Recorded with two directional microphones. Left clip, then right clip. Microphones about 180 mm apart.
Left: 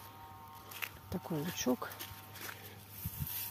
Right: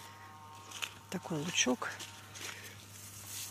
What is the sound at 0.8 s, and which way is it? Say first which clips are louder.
Speech: right 1 dB; 10° left (ahead or behind).